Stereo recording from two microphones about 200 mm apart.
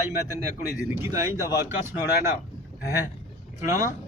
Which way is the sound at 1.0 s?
15° right (ahead or behind).